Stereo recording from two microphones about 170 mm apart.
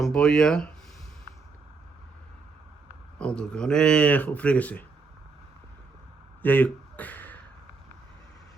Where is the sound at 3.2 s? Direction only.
5° left (ahead or behind).